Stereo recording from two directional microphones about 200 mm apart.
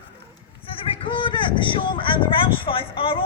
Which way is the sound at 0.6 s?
25° left (ahead or behind).